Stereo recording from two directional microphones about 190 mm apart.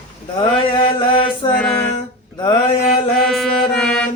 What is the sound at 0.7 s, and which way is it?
Mantra, 25° left (ahead or behind).